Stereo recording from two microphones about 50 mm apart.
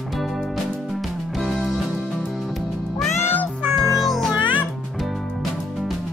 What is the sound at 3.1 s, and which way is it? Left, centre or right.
Music, left.